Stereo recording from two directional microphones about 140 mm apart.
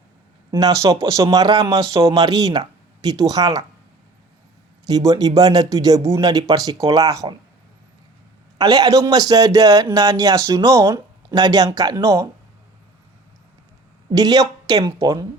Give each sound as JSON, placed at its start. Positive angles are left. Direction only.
{"t": 0.5, "sound": "a man's voice", "side_deg": -25}
{"t": 4.9, "sound": "a man's voice", "side_deg": -25}
{"t": 8.5, "sound": "a man's voice", "side_deg": -30}
{"t": 14.1, "sound": "a man's voice", "side_deg": -30}